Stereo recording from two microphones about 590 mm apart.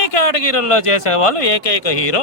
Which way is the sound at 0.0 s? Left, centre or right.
Left.